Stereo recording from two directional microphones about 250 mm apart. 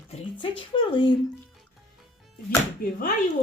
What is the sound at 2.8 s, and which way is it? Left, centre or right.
Speech, left.